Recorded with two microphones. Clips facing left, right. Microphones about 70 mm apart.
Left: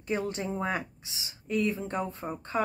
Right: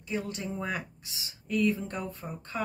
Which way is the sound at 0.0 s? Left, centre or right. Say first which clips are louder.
Left 3 dB; left.